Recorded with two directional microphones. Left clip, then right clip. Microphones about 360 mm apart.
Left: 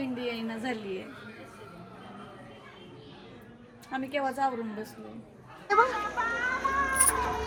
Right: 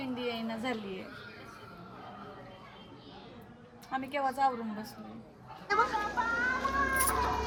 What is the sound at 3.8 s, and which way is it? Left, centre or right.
A woman's voice, right.